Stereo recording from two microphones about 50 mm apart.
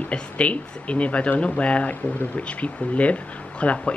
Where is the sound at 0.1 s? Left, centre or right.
Left.